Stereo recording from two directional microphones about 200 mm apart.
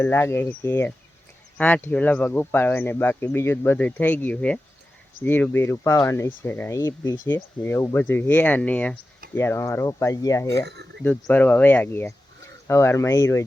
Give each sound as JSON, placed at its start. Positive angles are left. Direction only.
{"t": 0.0, "sound": "speech", "side_deg": 15}
{"t": 10.7, "sound": "speech", "side_deg": -55}
{"t": 11.0, "sound": "speech", "side_deg": 10}